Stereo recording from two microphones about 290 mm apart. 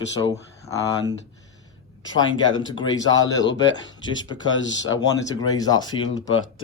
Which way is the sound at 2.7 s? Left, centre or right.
Centre.